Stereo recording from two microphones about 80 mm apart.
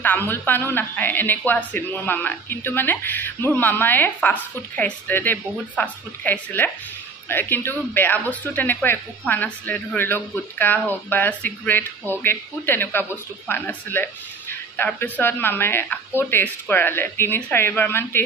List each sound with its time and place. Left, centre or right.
0.0 s a man's voice: left